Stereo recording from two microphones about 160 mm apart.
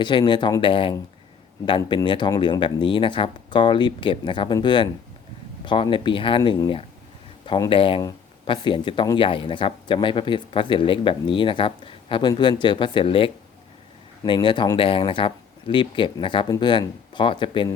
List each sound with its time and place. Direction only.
0.0 s speech: 30° left (ahead or behind)